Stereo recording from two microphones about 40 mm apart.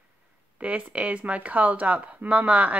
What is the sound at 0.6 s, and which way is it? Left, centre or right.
Speech, right.